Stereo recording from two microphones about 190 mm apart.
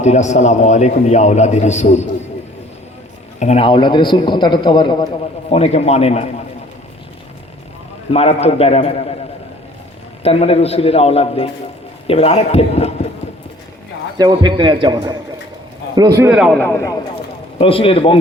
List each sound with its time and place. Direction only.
0.0 s a man's voice: 35° left (ahead or behind)
3.4 s a man's voice: 30° left (ahead or behind)
8.1 s a man's voice: 35° left (ahead or behind)
10.2 s a man's voice: 30° left (ahead or behind)
14.2 s a man's voice: 20° right (ahead or behind)
16.4 s a man's voice: 5° left (ahead or behind)
17.6 s a man's voice: 30° left (ahead or behind)